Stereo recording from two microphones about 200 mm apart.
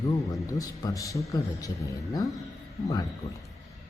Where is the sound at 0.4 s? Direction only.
15° left (ahead or behind).